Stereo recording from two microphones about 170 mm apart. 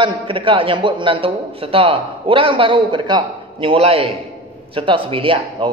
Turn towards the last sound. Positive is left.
turn(degrees=-30)  # may be behind; listen again after turning